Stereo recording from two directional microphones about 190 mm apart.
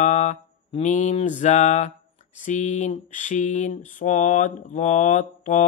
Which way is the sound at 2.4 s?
40° left (ahead or behind).